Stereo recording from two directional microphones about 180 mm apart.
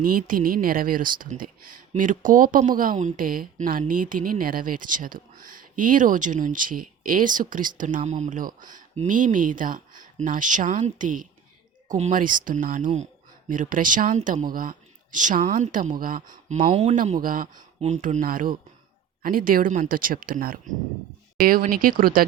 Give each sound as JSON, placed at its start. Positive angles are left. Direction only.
{"t": 0.0, "sound": "speech", "side_deg": -50}
{"t": 16.6, "sound": "speech", "side_deg": -35}
{"t": 17.7, "sound": "speech", "side_deg": -40}